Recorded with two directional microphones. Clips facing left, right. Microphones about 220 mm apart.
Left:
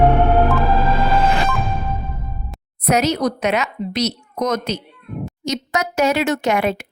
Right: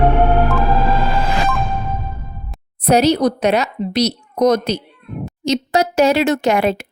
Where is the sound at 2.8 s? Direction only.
30° right (ahead or behind).